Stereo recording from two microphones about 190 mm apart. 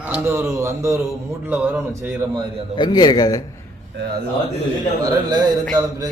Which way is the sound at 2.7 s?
20° left (ahead or behind).